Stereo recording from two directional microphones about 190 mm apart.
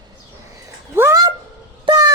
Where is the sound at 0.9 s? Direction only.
15° right (ahead or behind).